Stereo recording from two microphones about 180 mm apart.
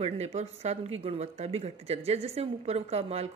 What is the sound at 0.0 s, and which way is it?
Speech, 40° right (ahead or behind).